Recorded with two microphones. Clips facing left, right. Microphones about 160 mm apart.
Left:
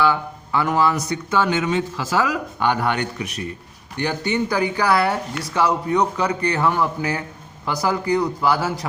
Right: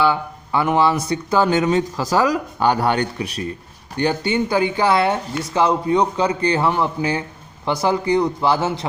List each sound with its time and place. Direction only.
0.0 s speech: 25° right (ahead or behind)